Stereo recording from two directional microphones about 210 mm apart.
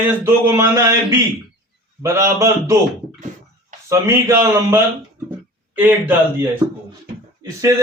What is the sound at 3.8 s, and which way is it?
Speech, 10° right (ahead or behind).